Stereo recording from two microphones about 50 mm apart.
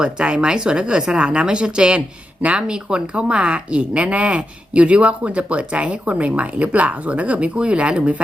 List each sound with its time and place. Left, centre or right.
0.0 s speech: centre